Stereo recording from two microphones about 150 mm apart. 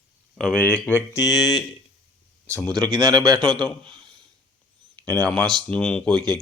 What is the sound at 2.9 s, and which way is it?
Speech, 25° right (ahead or behind).